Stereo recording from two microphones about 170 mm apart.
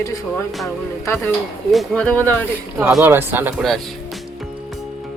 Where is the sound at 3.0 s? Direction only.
10° right (ahead or behind).